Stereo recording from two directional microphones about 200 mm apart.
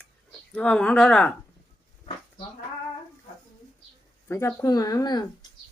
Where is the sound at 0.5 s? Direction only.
5° left (ahead or behind).